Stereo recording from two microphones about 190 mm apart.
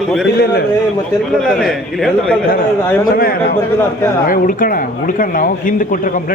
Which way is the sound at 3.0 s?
50° left (ahead or behind).